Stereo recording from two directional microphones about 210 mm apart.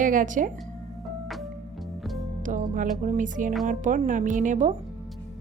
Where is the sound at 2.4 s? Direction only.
40° right (ahead or behind).